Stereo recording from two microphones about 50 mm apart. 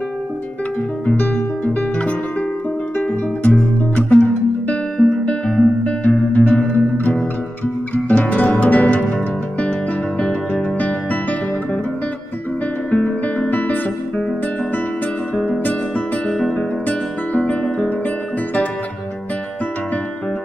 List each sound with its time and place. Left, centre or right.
1.1 s music: left
3.9 s music: left
4.9 s music: centre
6.0 s music: left
7.9 s music: left
12.9 s guitar: left
13.5 s guitar: left
16.3 s guitar: centre
16.8 s music: left